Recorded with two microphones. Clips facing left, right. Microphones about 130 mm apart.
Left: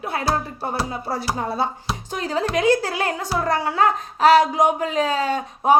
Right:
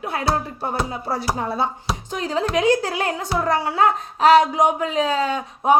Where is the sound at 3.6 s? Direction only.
45° left (ahead or behind).